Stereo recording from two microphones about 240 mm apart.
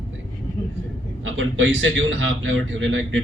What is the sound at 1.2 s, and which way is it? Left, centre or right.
A man's voice, right.